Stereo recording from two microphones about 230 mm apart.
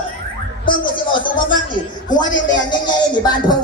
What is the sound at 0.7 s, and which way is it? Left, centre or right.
Speech, left.